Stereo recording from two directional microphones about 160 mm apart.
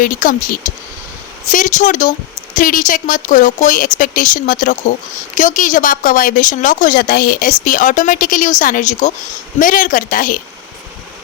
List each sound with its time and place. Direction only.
0.0 s a woman's voice: 55° left (ahead or behind)